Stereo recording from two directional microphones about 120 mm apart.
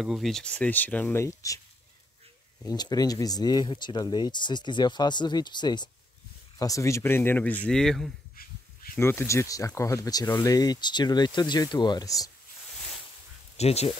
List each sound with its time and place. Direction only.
0.0 s speech: centre (ahead or behind); by 1.6 s 25° left (ahead or behind)
2.6 s speech: 30° left (ahead or behind)
6.6 s speech: 25° left (ahead or behind); by 8.1 s 5° left (ahead or behind)
8.9 s speech: 20° left (ahead or behind)
13.6 s speech: 60° left (ahead or behind)